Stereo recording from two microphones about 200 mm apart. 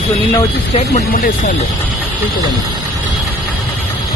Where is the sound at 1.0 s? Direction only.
40° left (ahead or behind).